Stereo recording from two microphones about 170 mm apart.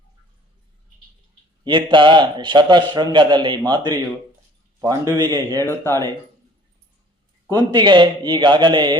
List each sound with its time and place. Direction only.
1.6 s speech: 30° right (ahead or behind)
5.5 s speech: 15° left (ahead or behind)
7.7 s speech: 25° right (ahead or behind)